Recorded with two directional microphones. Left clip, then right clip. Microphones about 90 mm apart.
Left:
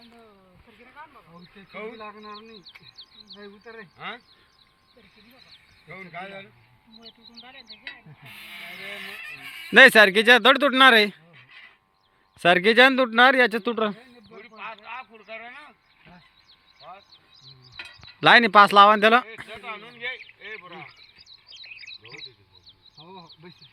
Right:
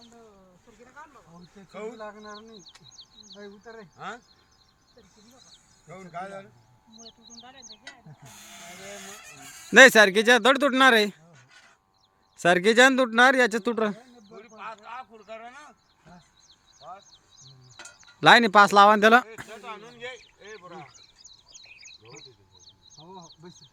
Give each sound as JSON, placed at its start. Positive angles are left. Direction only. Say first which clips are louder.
{"t": 1.7, "sound": "a man's voice", "louder": "left 1 dB", "side_deg": -5}
{"t": 5.9, "sound": "speech", "louder": "even", "side_deg": -10}
{"t": 8.4, "sound": "speech", "louder": "left 6 dB", "side_deg": -50}
{"t": 9.6, "sound": "speech", "louder": "left 1 dB", "side_deg": -10}
{"t": 12.4, "sound": "speech", "louder": "left 2 dB", "side_deg": -10}
{"t": 13.7, "sound": "speech", "louder": "left 1 dB", "side_deg": -25}
{"t": 13.9, "sound": "a sound", "louder": "even", "side_deg": -40}
{"t": 14.8, "sound": "a man's voice", "louder": "left 2 dB", "side_deg": 5}
{"t": 17.5, "sound": "bird", "louder": "left 7 dB", "side_deg": -15}
{"t": 18.8, "sound": "speech", "louder": "left 1 dB", "side_deg": -45}
{"t": 19.5, "sound": "speech", "louder": "left 3 dB", "side_deg": 10}
{"t": 20.5, "sound": "a sound", "louder": "left 4 dB", "side_deg": -5}